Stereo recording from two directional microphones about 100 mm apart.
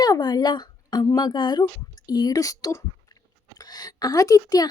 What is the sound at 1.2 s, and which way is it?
Speech, 50° left (ahead or behind).